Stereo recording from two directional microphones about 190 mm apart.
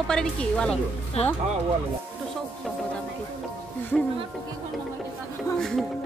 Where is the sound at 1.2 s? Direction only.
35° left (ahead or behind).